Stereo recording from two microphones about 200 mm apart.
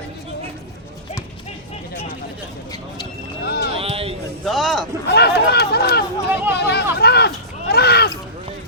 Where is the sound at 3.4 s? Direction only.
50° left (ahead or behind).